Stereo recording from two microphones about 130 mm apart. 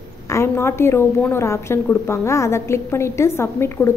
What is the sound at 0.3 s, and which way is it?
A woman's voice, 20° left (ahead or behind).